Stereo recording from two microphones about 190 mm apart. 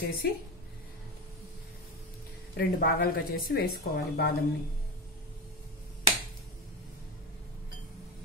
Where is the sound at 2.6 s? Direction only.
50° left (ahead or behind).